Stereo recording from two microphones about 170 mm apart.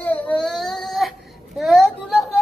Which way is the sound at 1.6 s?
Centre (ahead or behind).